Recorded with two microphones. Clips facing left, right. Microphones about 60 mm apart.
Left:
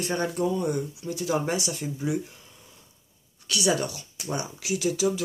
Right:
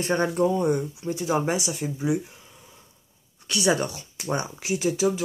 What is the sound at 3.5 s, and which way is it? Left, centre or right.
Speech, right.